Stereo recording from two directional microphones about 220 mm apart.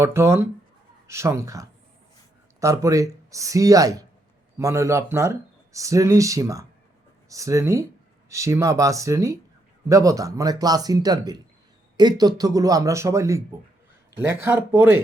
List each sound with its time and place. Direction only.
0.0 s speech: 10° right (ahead or behind)